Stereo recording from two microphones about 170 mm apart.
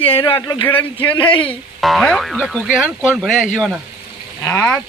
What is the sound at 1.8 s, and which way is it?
Speech, centre (ahead or behind).